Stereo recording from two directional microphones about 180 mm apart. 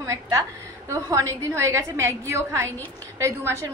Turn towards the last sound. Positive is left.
turn(degrees=-15)  # may be behind; listen again after turning